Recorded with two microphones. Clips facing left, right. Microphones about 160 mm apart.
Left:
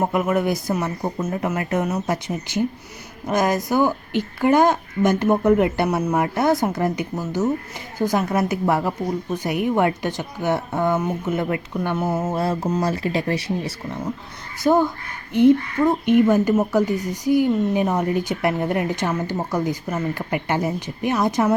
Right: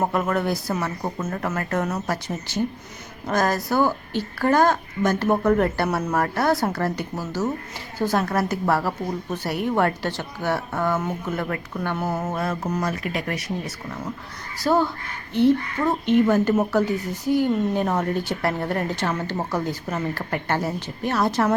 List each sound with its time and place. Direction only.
0.0 s a woman's voice: 10° left (ahead or behind); by 14.0 s 30° left (ahead or behind)
14.6 s a woman's voice: 15° left (ahead or behind)